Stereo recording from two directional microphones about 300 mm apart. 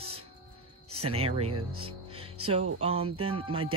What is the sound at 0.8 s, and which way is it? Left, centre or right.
Music, right.